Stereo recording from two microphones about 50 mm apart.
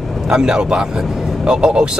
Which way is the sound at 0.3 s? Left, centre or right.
Centre.